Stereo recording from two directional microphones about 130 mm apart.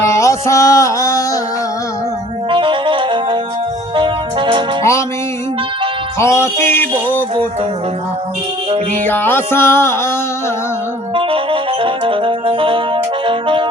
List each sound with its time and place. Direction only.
0.0 s music: 20° left (ahead or behind)
2.5 s music: 40° right (ahead or behind)
4.8 s music: 20° left (ahead or behind)
6.1 s music: 20° left (ahead or behind)
9.0 s music: 15° left (ahead or behind)
11.1 s music: 40° right (ahead or behind)